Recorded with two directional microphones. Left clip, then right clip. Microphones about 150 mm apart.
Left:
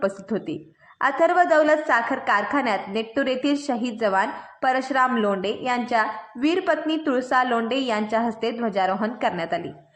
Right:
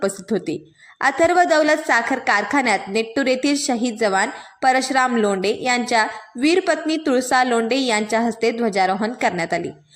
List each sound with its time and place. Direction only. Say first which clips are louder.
0.0 s a woman's voice: right 3 dB; 30° right (ahead or behind)